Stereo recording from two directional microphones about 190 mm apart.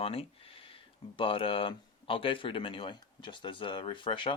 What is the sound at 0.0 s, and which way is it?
Speech, 30° left (ahead or behind).